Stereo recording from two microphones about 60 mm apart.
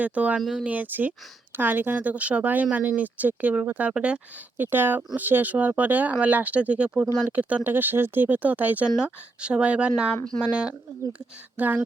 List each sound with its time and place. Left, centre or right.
0.0 s speech: right
4.5 s speech: right; by 10.7 s centre
11.5 s speech: right